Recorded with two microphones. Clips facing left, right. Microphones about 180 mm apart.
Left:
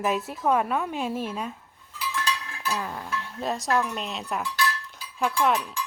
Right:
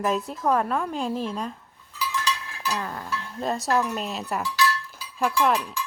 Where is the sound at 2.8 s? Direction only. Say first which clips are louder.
Right 1 dB; 10° left (ahead or behind).